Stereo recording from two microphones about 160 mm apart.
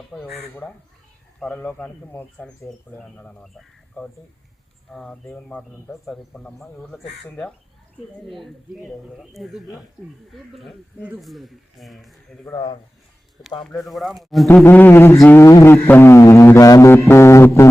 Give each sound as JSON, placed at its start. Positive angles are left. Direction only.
{"t": 0.1, "sound": "a sound", "side_deg": 0}
{"t": 0.3, "sound": "speech", "side_deg": 10}
{"t": 13.7, "sound": "speech", "side_deg": 0}
{"t": 14.4, "sound": "speech", "side_deg": 10}